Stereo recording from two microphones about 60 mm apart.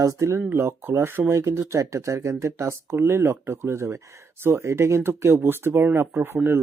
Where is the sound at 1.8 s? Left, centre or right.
Right.